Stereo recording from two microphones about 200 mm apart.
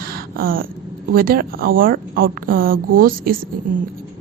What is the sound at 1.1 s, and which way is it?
A woman's voice, 45° right (ahead or behind).